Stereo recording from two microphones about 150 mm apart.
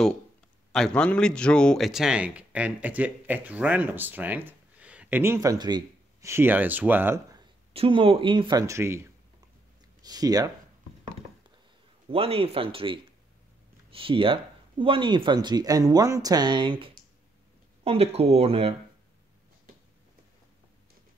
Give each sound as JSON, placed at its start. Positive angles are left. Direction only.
{"t": 0.7, "sound": "speech", "side_deg": 5}
{"t": 6.3, "sound": "speech", "side_deg": -15}
{"t": 7.7, "sound": "speech", "side_deg": -40}
{"t": 12.1, "sound": "speech", "side_deg": -40}